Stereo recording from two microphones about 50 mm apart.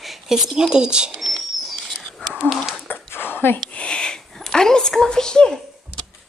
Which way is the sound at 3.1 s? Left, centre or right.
Left.